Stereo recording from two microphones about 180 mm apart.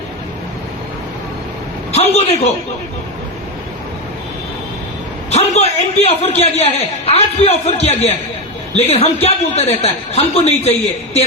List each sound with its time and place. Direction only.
1.9 s a man's voice: 35° left (ahead or behind)
5.3 s a man's voice: 35° left (ahead or behind)